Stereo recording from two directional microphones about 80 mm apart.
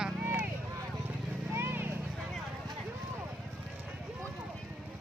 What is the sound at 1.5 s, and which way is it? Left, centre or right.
Vehicle, right.